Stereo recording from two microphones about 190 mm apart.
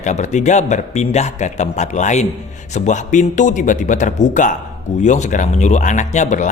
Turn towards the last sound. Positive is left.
turn(degrees=40)  # may be behind; listen again after turning